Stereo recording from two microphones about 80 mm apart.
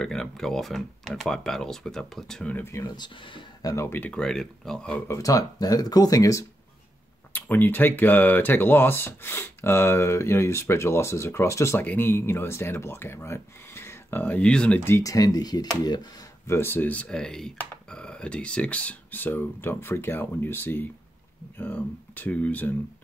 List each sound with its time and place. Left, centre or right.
0.0 s speech: centre
3.0 s speech: left
3.6 s speech: left
4.1 s speech: centre
5.0 s speech: left
7.3 s speech: left
11.8 s speech: left
14.2 s speech: centre
14.9 s speech: left
16.4 s speech: left